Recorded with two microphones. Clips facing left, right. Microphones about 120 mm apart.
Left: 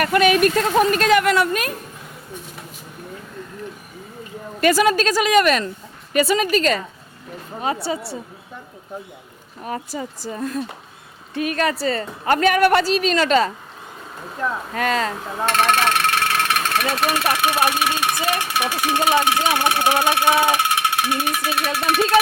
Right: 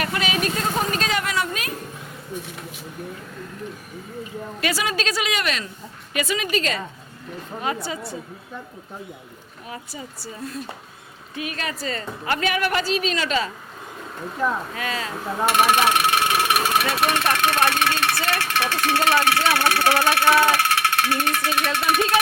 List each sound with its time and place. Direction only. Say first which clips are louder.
0.0 s speech: left 9 dB; 55° left (ahead or behind)
4.6 s a woman's voice: left 9 dB; 50° left (ahead or behind)
7.6 s a woman's voice: left 4 dB; 30° left (ahead or behind)
9.9 s a woman's voice: left 7 dB; 50° left (ahead or behind)
14.4 s speech: right 1 dB; 5° right (ahead or behind)
14.8 s speech: left 7 dB; 60° left (ahead or behind)
15.4 s a sound: even; 15° right (ahead or behind)
16.8 s speech: left 1 dB; centre (ahead or behind)